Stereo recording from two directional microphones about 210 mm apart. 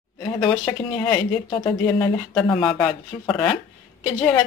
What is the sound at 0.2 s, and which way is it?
A woman's voice, 15° left (ahead or behind).